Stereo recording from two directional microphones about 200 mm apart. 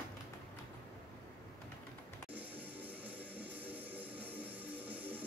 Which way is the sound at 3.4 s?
10° right (ahead or behind).